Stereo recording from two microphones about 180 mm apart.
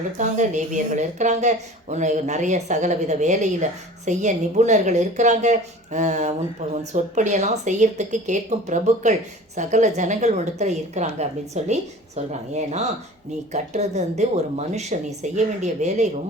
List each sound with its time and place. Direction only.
0.2 s speech: 40° right (ahead or behind)